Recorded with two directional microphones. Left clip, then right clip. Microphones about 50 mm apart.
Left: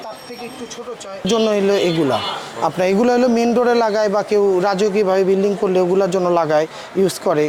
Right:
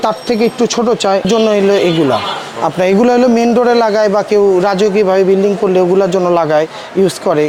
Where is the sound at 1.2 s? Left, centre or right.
Centre.